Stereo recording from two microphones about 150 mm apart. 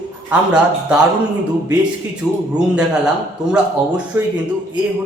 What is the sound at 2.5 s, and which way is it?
A man's voice, 5° right (ahead or behind).